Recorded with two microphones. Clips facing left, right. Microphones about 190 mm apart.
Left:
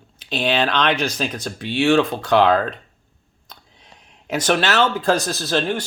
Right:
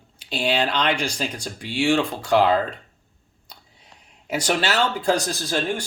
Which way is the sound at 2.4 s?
75° left (ahead or behind).